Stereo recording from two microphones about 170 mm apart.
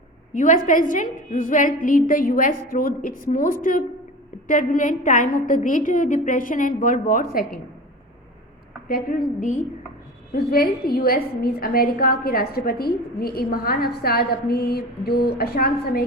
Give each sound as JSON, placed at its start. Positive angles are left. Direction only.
{"t": 0.3, "sound": "a woman's voice", "side_deg": 50}
{"t": 8.9, "sound": "a woman's voice", "side_deg": 55}
{"t": 10.3, "sound": "a woman's voice", "side_deg": 60}